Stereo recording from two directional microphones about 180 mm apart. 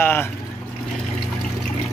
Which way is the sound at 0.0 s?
10° left (ahead or behind).